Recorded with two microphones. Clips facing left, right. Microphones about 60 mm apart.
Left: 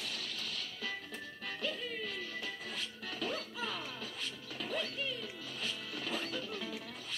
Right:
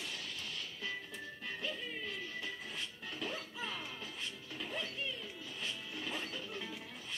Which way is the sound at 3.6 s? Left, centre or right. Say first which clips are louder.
Left 2 dB; right.